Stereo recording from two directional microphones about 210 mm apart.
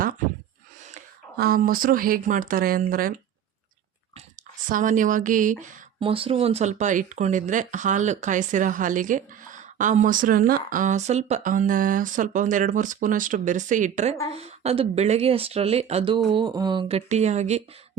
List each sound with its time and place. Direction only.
1.4 s speech: 45° right (ahead or behind)
4.7 s speech: 40° right (ahead or behind)
6.0 s speech: 25° right (ahead or behind)